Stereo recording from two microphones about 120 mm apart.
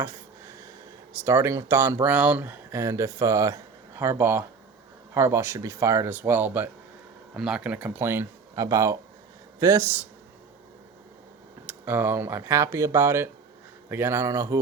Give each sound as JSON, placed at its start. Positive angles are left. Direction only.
{"t": 0.0, "sound": "a sound", "side_deg": -25}
{"t": 1.2, "sound": "speech", "side_deg": -20}
{"t": 7.3, "sound": "speech", "side_deg": -5}
{"t": 11.6, "sound": "speech", "side_deg": -15}